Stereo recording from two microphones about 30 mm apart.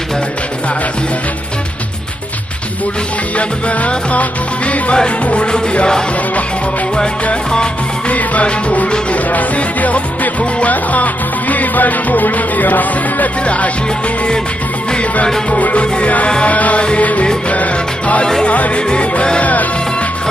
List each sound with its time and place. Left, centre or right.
3.3 s music: left
8.1 s music: left
15.5 s music: left
18.8 s music: left
19.4 s music: left